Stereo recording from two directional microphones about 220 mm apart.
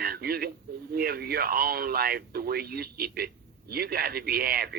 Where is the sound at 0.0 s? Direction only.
45° right (ahead or behind).